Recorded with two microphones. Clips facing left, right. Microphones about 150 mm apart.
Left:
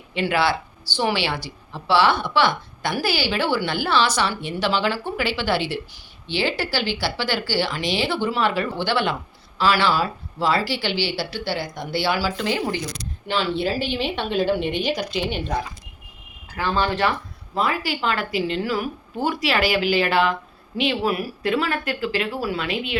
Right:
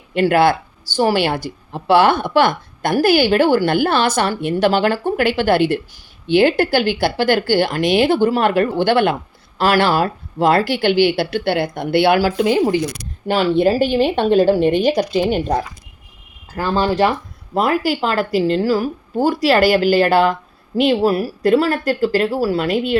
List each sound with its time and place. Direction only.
0.1 s speech: 50° right (ahead or behind)
16.6 s a woman's voice: 40° right (ahead or behind)
17.5 s a woman's voice: 50° right (ahead or behind)